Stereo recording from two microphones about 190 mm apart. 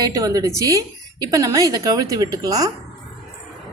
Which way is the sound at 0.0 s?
20° right (ahead or behind).